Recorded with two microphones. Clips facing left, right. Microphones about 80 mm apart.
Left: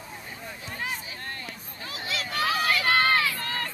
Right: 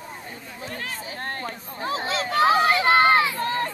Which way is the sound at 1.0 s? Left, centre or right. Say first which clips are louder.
Right 7 dB; right.